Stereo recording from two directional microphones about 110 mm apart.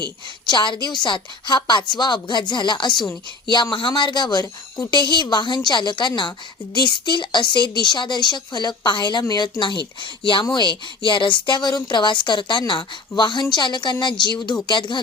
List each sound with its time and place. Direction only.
0.4 s a woman's voice: 45° left (ahead or behind)